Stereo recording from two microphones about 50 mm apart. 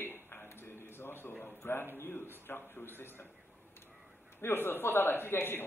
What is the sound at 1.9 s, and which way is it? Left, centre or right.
A man's voice, left.